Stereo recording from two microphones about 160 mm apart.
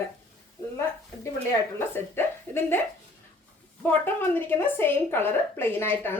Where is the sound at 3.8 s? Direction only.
10° left (ahead or behind).